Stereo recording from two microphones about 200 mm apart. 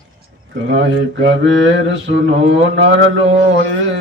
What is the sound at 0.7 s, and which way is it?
Speech, 60° right (ahead or behind).